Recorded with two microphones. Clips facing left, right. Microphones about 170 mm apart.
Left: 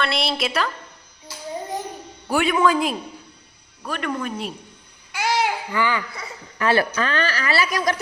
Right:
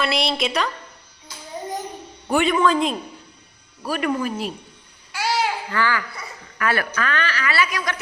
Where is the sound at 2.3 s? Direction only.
5° left (ahead or behind).